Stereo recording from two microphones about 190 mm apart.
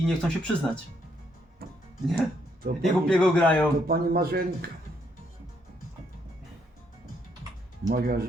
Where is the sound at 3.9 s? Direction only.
55° right (ahead or behind).